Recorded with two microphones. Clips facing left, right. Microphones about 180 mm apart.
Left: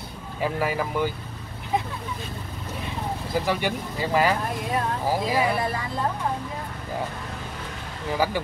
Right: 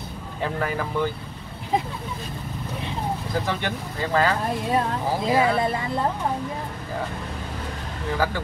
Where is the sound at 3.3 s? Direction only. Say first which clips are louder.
Left 5 dB; 10° left (ahead or behind).